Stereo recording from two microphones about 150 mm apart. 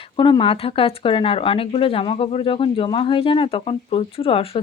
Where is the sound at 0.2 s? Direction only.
35° left (ahead or behind).